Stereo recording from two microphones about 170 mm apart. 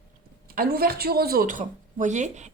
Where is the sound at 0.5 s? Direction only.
60° right (ahead or behind).